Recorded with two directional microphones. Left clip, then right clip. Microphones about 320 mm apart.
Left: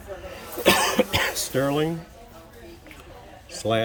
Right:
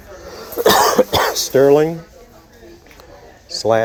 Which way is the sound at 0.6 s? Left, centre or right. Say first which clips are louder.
Right 8 dB; right.